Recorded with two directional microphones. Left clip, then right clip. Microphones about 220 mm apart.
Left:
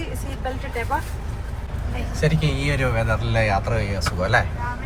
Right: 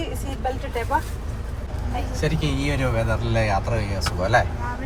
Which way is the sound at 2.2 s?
10° right (ahead or behind).